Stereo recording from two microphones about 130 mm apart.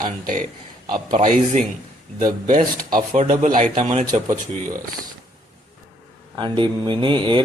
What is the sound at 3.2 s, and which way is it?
Speech, 65° right (ahead or behind).